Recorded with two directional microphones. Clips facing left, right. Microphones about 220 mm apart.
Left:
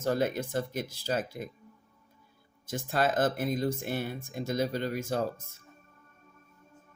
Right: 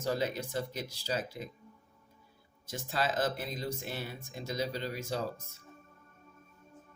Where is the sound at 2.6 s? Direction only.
50° left (ahead or behind).